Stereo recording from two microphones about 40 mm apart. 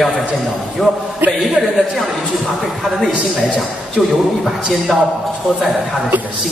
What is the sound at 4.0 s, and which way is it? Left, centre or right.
A man's voice, centre.